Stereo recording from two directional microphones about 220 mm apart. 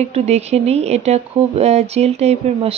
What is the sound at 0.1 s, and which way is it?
Speech, 30° right (ahead or behind).